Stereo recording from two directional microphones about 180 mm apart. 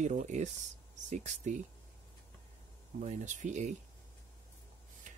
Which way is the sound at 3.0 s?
40° right (ahead or behind).